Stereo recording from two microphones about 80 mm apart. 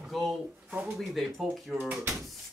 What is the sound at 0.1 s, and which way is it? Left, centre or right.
Speech, centre.